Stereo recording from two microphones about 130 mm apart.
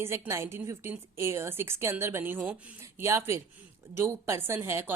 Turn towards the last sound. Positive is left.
turn(degrees=-20)  # may be behind; listen again after turning